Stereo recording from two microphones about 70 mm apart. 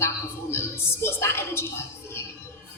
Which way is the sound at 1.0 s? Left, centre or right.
Left.